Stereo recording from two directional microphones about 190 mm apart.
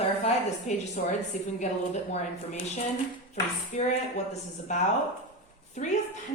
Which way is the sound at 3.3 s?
35° left (ahead or behind).